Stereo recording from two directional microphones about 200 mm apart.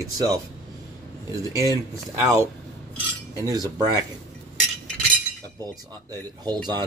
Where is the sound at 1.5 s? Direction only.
15° right (ahead or behind).